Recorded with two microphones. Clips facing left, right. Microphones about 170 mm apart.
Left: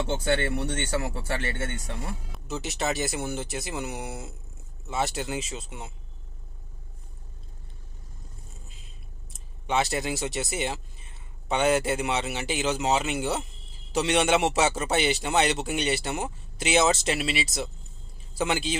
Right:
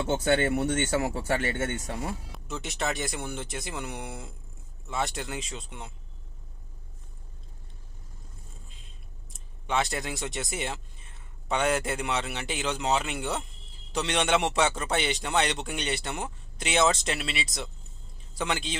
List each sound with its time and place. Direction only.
0.5 s speech: 20° right (ahead or behind)
2.3 s speech: centre (ahead or behind)
9.3 s speech: 5° left (ahead or behind)